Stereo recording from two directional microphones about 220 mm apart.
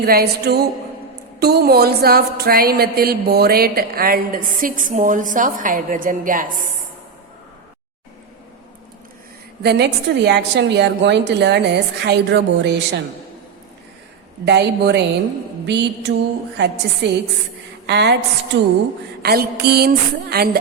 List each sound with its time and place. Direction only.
0.0 s a woman's voice: 45° right (ahead or behind)
9.6 s a woman's voice: 50° right (ahead or behind)
14.4 s a woman's voice: 50° right (ahead or behind)